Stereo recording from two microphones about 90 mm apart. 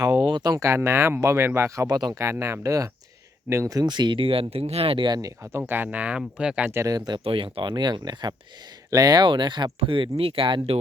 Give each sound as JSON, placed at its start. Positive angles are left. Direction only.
{"t": 0.3, "sound": "speech", "side_deg": -55}
{"t": 0.6, "sound": "speech", "side_deg": -30}
{"t": 1.9, "sound": "speech", "side_deg": -50}
{"t": 2.1, "sound": "speech", "side_deg": -30}
{"t": 3.8, "sound": "speech", "side_deg": -55}
{"t": 5.1, "sound": "speech", "side_deg": -35}
{"t": 6.8, "sound": "speech", "side_deg": -45}
{"t": 7.3, "sound": "speech", "side_deg": -80}
{"t": 9.8, "sound": "speech", "side_deg": -75}